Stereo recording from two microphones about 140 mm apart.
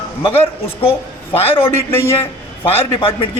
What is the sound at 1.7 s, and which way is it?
Speech, 20° left (ahead or behind).